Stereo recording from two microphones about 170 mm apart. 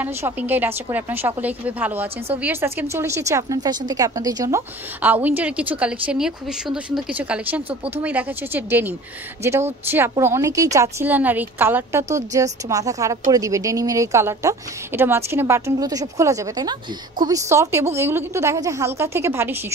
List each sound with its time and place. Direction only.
0.0 s a woman's voice: 10° right (ahead or behind)